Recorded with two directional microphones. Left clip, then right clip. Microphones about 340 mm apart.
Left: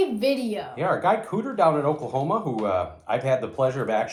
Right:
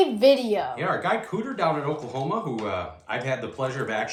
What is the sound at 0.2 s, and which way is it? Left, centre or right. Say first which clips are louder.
Speech: right 6 dB; centre.